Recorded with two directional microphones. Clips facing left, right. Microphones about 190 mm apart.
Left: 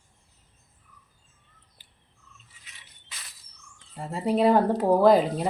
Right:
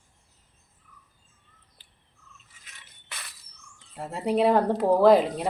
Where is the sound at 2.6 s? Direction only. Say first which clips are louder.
Right 1 dB; 55° right (ahead or behind).